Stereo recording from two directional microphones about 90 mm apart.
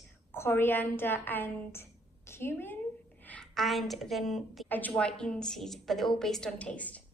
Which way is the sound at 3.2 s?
15° left (ahead or behind).